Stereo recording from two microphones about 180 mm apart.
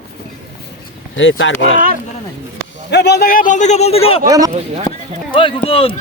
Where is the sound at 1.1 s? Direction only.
90° left.